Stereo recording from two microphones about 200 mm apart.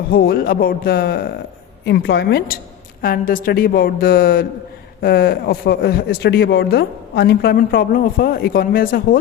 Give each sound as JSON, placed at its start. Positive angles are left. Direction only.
{"t": 0.1, "sound": "a woman's voice", "side_deg": 50}
{"t": 3.0, "sound": "speech", "side_deg": 45}